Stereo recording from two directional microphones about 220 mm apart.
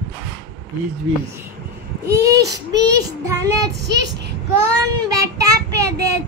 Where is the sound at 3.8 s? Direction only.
50° right (ahead or behind).